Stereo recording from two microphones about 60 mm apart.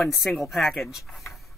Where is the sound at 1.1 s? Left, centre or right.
Centre.